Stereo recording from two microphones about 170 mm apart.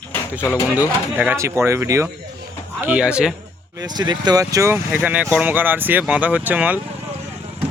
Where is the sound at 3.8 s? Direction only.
25° right (ahead or behind); by 6.8 s 10° right (ahead or behind).